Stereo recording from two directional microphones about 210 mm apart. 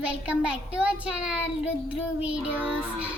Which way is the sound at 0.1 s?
5° right (ahead or behind).